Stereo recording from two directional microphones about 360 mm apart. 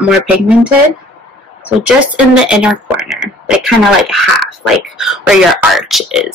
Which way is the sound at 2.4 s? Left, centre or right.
Centre.